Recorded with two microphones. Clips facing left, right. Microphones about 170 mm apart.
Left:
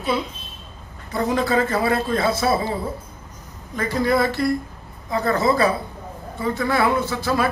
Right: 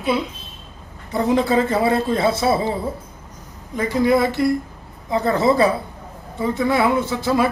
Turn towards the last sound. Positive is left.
turn(degrees=-20)  # may be behind; listen again after turning